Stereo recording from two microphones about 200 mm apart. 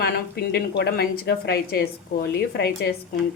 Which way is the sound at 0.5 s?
55° left (ahead or behind).